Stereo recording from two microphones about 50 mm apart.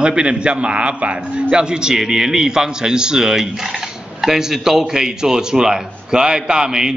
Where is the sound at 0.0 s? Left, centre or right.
Centre.